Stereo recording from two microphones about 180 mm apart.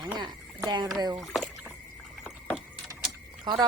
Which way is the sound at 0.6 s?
20° right (ahead or behind).